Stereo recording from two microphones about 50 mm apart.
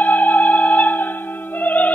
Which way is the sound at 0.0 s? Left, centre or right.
Left.